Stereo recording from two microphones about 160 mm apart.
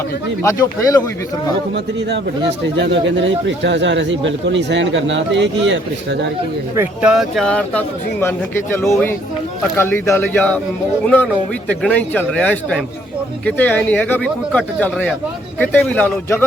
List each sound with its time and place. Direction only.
0.4 s speech: 20° left (ahead or behind)
1.7 s speech: 90° right
6.7 s speech: 5° right (ahead or behind)